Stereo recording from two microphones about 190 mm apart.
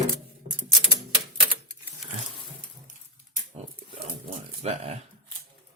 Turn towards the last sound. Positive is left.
turn(degrees=-35)  # may be behind; listen again after turning